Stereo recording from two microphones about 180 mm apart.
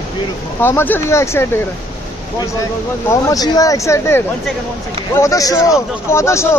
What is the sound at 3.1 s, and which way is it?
A man's voice, 20° left (ahead or behind).